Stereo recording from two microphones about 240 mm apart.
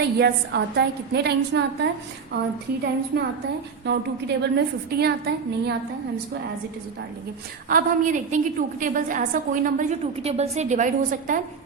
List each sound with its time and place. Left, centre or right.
0.2 s a woman's voice: right
3.1 s a woman's voice: right
7.7 s a woman's voice: right